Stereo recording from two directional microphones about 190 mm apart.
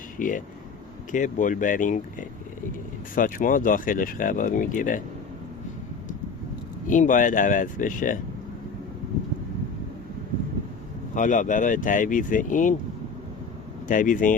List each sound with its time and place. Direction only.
0.2 s speech: 45° left (ahead or behind)
6.8 s speech: 45° left (ahead or behind)
11.1 s speech: 40° left (ahead or behind)
13.8 s speech: 45° left (ahead or behind)